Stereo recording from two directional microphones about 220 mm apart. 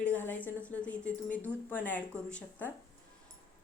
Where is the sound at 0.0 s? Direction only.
10° left (ahead or behind).